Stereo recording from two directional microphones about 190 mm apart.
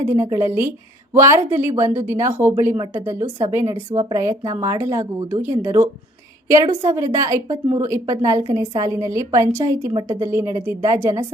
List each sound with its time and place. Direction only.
0.1 s speech: 15° right (ahead or behind)